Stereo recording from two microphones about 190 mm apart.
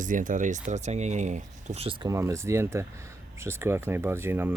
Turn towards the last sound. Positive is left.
turn(degrees=-10)  # may be behind; listen again after turning